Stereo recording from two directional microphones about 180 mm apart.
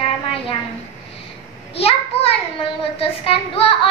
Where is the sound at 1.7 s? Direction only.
35° left (ahead or behind).